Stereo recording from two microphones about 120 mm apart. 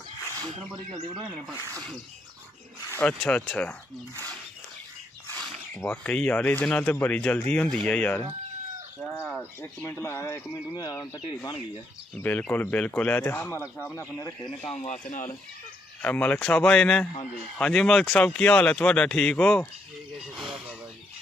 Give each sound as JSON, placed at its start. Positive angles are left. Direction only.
{"t": 3.0, "sound": "speech", "side_deg": 10}
{"t": 5.3, "sound": "speech", "side_deg": 15}
{"t": 9.4, "sound": "speech", "side_deg": 15}
{"t": 10.8, "sound": "speech", "side_deg": 35}
{"t": 12.2, "sound": "speech", "side_deg": 15}
{"t": 14.4, "sound": "speech", "side_deg": 5}
{"t": 14.8, "sound": "speech", "side_deg": 85}
{"t": 16.0, "sound": "speech", "side_deg": 15}
{"t": 20.2, "sound": "speech", "side_deg": -5}